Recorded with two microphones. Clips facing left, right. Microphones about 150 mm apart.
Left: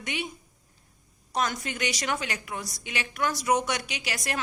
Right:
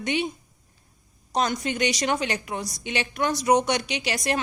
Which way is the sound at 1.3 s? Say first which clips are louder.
Right 4 dB; 20° right (ahead or behind).